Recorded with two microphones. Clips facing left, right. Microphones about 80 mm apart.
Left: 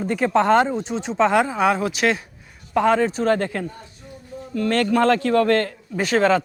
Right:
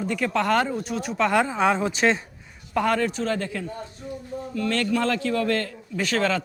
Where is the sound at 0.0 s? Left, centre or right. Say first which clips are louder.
Left 4 dB; left.